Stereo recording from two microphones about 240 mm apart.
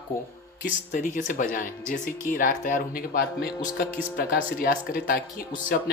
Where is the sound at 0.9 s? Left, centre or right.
Left.